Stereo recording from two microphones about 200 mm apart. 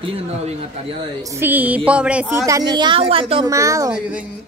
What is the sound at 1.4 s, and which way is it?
Speech, 10° right (ahead or behind).